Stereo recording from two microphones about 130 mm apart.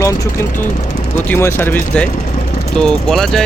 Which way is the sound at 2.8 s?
5° left (ahead or behind).